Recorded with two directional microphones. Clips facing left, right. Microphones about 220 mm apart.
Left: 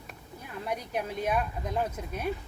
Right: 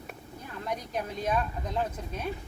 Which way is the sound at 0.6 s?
10° left (ahead or behind).